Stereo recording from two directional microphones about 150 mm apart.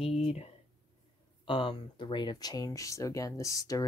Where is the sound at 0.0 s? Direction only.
45° left (ahead or behind).